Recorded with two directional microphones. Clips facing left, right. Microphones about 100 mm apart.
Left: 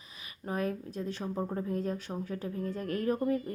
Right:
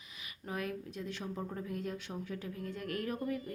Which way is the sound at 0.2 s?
35° left (ahead or behind).